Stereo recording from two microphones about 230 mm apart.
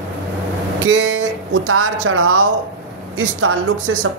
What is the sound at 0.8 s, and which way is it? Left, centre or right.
Guitar, right.